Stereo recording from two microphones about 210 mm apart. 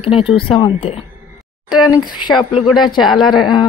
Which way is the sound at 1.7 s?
5° right (ahead or behind).